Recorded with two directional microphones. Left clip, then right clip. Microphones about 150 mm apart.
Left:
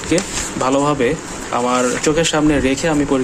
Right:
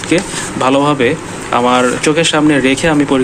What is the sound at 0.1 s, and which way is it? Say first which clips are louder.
Speech: right 4 dB; 10° left (ahead or behind).